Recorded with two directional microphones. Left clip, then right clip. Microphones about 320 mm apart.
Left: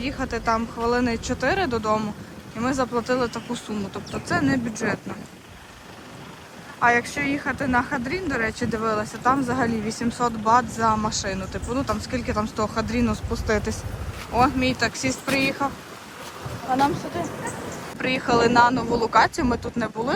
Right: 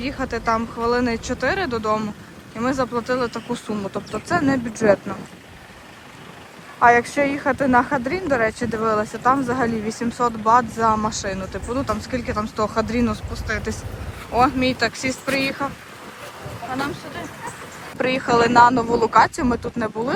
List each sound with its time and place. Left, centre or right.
0.0 s speech: centre
6.7 s speech: centre
13.3 s speech: centre
14.3 s speech: centre
17.9 s speech: centre